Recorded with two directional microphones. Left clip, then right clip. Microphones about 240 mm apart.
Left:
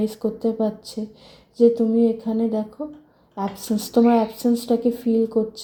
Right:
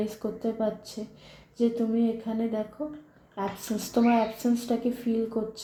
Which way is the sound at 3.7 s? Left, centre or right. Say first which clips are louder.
Left 7 dB; left.